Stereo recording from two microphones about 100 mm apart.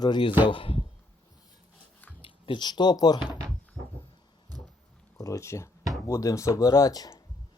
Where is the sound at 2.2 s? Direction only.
60° left (ahead or behind); by 3.4 s 45° left (ahead or behind).